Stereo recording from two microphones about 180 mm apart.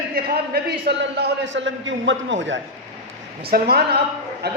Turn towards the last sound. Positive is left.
turn(degrees=-65)  # may be behind; listen again after turning